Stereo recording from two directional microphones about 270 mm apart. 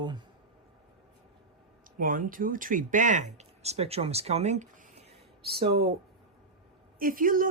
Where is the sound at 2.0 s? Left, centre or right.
Right.